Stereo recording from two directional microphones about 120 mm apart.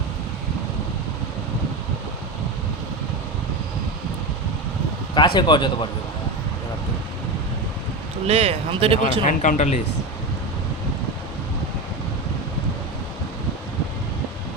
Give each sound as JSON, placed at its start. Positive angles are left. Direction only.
{"t": 5.1, "sound": "speech", "side_deg": 40}
{"t": 8.3, "sound": "speech", "side_deg": -55}
{"t": 9.2, "sound": "speech", "side_deg": 85}